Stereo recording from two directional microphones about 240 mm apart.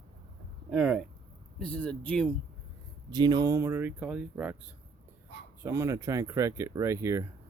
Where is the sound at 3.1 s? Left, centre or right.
Centre.